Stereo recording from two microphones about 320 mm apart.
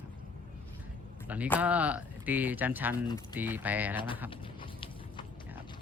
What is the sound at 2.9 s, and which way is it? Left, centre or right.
Speech, centre.